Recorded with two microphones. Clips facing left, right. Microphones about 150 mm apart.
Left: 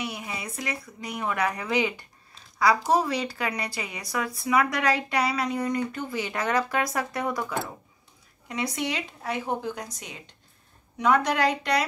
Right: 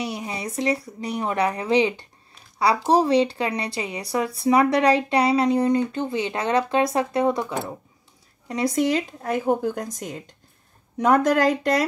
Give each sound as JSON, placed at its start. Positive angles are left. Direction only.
{"t": 0.0, "sound": "speech", "side_deg": -35}
{"t": 8.5, "sound": "speech", "side_deg": -40}